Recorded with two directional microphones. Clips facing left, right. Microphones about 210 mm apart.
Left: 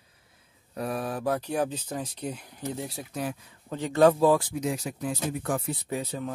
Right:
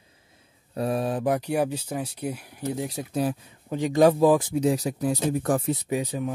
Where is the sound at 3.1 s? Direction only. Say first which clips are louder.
Right 8 dB; 35° right (ahead or behind).